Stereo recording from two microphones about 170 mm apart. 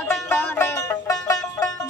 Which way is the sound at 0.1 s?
10° left (ahead or behind).